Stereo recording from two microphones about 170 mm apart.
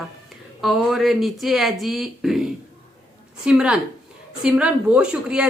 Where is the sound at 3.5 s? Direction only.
5° right (ahead or behind).